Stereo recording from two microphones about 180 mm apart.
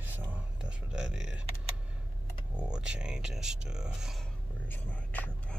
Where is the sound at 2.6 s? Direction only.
5° right (ahead or behind).